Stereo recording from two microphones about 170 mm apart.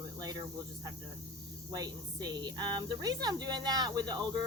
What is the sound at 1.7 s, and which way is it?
Speech, 25° right (ahead or behind).